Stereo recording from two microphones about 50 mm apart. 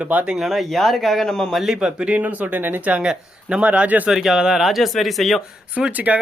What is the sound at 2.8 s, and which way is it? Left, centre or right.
Speech, right.